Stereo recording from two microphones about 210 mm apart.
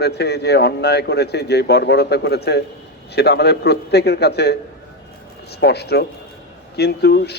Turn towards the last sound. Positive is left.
turn(degrees=50)  # may be behind; listen again after turning